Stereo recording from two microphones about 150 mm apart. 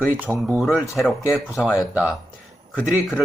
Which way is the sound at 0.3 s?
15° right (ahead or behind).